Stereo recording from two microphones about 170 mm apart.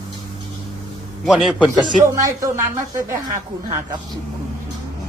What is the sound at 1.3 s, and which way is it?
Speech, centre (ahead or behind).